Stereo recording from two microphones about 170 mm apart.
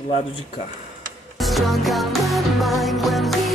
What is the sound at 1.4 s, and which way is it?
Music, centre (ahead or behind).